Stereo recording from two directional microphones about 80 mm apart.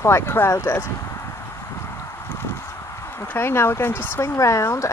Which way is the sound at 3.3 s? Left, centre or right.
Left.